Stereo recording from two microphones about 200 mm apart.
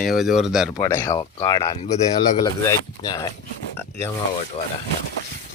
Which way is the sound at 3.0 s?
20° left (ahead or behind).